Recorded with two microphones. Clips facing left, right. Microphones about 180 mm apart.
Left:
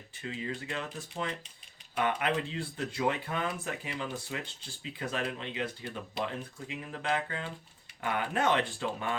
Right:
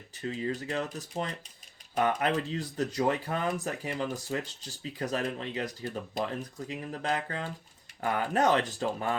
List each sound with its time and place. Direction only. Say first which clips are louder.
0.2 s speech: right 5 dB; 40° right (ahead or behind)